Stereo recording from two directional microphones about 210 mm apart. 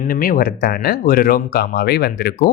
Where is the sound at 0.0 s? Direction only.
45° left (ahead or behind).